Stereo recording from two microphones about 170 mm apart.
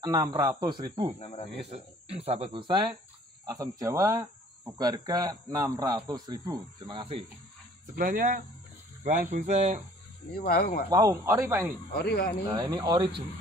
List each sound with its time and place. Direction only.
0.0 s speech: 20° right (ahead or behind)
7.9 s speech: 60° right (ahead or behind)
9.0 s speech: 50° right (ahead or behind)
10.3 s speech: 65° left (ahead or behind)
10.9 s speech: 20° right (ahead or behind)
12.5 s speech: 20° right (ahead or behind)